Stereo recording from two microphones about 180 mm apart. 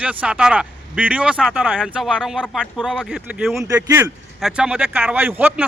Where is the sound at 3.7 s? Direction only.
20° right (ahead or behind).